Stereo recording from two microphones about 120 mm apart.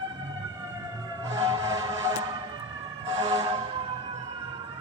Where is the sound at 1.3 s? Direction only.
30° right (ahead or behind).